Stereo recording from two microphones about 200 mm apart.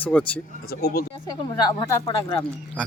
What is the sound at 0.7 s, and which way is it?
Speech, 50° left (ahead or behind).